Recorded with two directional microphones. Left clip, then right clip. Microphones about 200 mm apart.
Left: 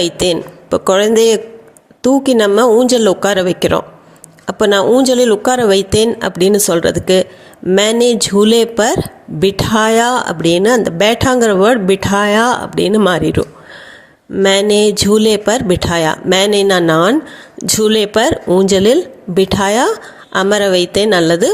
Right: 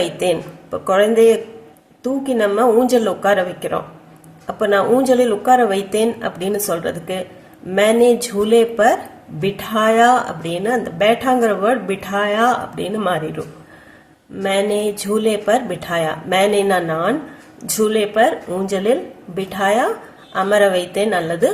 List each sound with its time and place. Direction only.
0.0 s a woman's voice: 45° left (ahead or behind)
14.4 s a woman's voice: 50° left (ahead or behind)